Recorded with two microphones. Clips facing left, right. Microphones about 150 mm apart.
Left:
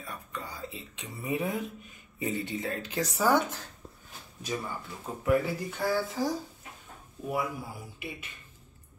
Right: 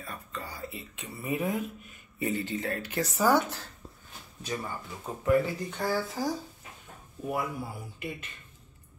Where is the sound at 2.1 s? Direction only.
15° left (ahead or behind).